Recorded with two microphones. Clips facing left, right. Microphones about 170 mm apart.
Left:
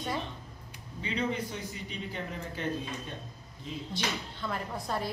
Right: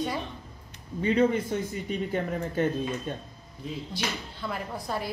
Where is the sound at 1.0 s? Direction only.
50° right (ahead or behind).